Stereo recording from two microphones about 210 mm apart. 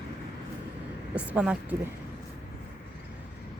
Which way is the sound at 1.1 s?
5° right (ahead or behind).